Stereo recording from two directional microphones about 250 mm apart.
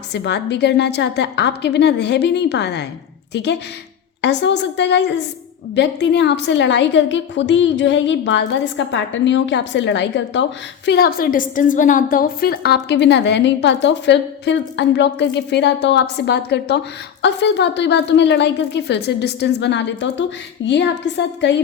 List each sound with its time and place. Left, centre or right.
0.1 s a woman's voice: left